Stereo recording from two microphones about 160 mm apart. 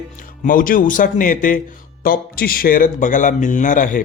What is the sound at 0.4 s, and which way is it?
A man's voice, 60° left (ahead or behind).